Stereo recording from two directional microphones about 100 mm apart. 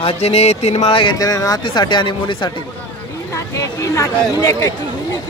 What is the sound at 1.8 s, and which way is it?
Speech, 50° left (ahead or behind).